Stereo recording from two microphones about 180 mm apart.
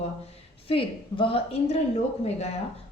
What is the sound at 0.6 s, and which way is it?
A woman's voice, 30° left (ahead or behind).